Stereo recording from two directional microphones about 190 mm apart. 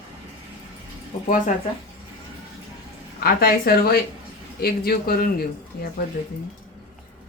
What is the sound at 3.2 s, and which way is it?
Speech, 50° left (ahead or behind).